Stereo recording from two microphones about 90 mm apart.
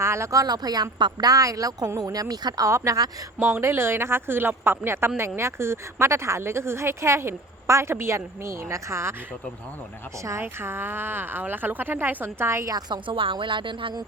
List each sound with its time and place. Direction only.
0.0 s a woman's voice: 30° right (ahead or behind); by 1.3 s 55° right (ahead or behind)
1.3 s a woman's voice: 40° right (ahead or behind)
2.6 s a woman's voice: 35° right (ahead or behind)
3.3 s speech: 30° right (ahead or behind)
10.2 s speech: 30° right (ahead or behind)
12.7 s speech: 65° right (ahead or behind)